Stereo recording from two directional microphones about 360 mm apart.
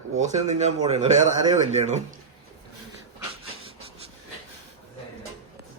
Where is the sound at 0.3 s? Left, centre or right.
Centre.